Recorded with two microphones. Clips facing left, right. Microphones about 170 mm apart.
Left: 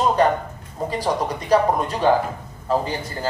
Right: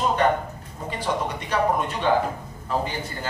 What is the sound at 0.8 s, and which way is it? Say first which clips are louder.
Speech: left 4 dB; 40° left (ahead or behind).